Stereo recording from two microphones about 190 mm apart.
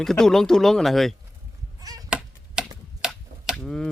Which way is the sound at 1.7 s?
20° right (ahead or behind).